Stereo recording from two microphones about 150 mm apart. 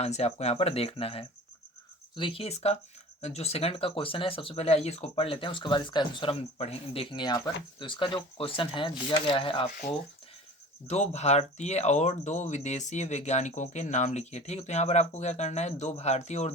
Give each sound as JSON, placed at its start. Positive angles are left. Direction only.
{"t": 0.0, "sound": "speech", "side_deg": 45}
{"t": 6.6, "sound": "speech", "side_deg": 40}
{"t": 9.6, "sound": "speech", "side_deg": 70}
{"t": 10.8, "sound": "speech", "side_deg": 50}